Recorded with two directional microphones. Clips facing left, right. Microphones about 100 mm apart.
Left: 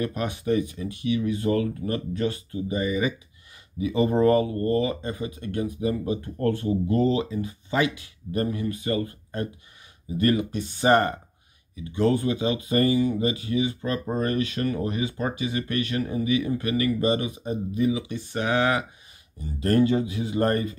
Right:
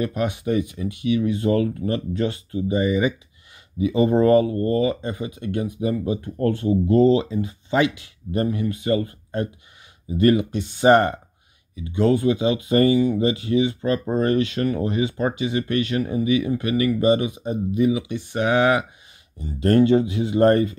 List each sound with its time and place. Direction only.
0.0 s speech: 15° right (ahead or behind)
19.6 s speech: 30° right (ahead or behind)